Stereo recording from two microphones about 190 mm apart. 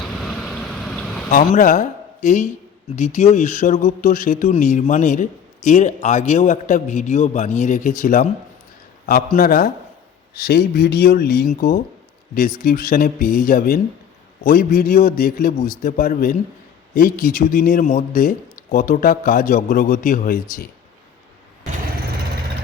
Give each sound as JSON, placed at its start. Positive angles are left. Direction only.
{"t": 0.0, "sound": "vehicle", "side_deg": 0}
{"t": 1.3, "sound": "speech", "side_deg": 45}